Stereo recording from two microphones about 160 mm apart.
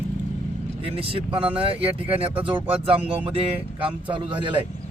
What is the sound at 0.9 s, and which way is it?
Speech, 35° right (ahead or behind).